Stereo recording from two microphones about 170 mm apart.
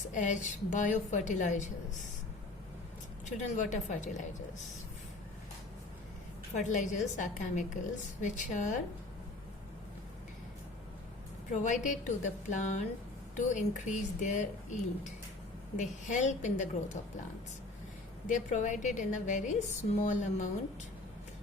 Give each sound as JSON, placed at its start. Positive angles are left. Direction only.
{"t": 0.1, "sound": "a woman's voice", "side_deg": 45}
{"t": 3.2, "sound": "a woman's voice", "side_deg": 45}
{"t": 6.5, "sound": "a woman's voice", "side_deg": 45}
{"t": 11.5, "sound": "a woman's voice", "side_deg": 45}
{"t": 18.3, "sound": "a woman's voice", "side_deg": 45}